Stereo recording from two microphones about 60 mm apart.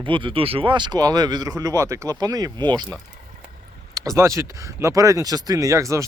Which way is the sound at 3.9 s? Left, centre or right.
Right.